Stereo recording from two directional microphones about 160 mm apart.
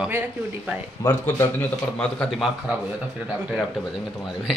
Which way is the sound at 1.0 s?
15° left (ahead or behind).